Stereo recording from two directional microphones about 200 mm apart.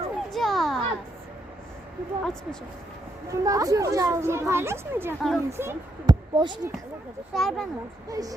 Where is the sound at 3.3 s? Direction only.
15° right (ahead or behind).